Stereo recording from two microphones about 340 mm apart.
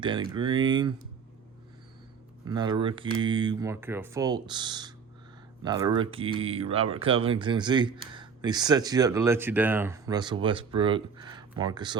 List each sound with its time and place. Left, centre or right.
0.0 s speech: centre
2.4 s speech: centre